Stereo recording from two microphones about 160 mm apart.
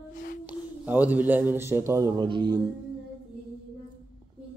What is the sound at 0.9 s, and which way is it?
A man's voice, 10° right (ahead or behind).